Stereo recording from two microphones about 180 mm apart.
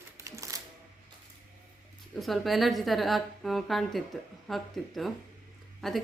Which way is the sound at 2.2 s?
Centre (ahead or behind).